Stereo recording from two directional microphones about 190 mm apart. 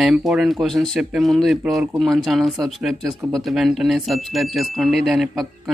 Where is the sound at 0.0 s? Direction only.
Centre (ahead or behind).